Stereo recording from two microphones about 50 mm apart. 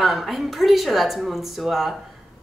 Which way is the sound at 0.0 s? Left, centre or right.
Centre.